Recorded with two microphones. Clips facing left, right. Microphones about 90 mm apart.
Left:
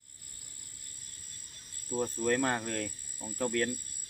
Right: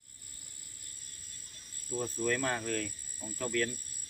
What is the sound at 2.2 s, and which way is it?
Speech, 40° left (ahead or behind).